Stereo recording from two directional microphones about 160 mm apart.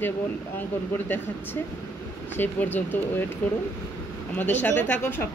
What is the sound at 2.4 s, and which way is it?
Speech, 10° left (ahead or behind).